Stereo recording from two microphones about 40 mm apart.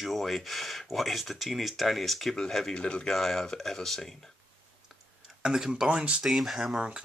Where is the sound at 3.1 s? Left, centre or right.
Centre.